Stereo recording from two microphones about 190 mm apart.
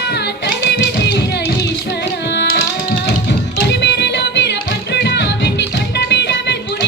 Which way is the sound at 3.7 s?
65° left (ahead or behind).